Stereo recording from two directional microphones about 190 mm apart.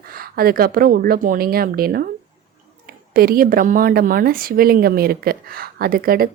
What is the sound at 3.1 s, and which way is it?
A woman's voice, 50° right (ahead or behind).